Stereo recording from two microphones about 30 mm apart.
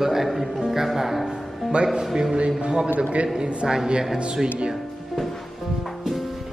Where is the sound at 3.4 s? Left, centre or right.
Right.